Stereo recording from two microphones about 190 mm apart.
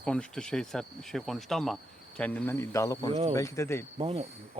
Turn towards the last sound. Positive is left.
turn(degrees=-35)  # may be behind; listen again after turning